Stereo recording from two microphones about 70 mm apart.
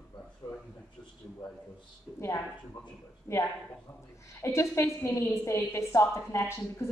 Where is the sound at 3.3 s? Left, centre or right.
Left.